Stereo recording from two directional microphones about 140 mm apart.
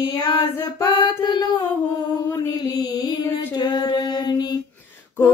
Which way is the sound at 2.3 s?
25° left (ahead or behind).